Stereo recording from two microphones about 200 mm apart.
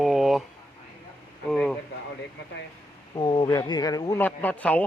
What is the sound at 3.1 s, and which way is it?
Speech, 25° left (ahead or behind).